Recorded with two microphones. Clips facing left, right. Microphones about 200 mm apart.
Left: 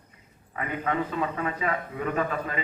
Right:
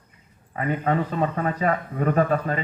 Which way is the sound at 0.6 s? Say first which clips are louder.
Right 5 dB; 35° right (ahead or behind).